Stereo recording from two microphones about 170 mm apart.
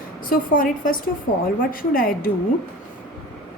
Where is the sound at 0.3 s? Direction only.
55° left (ahead or behind).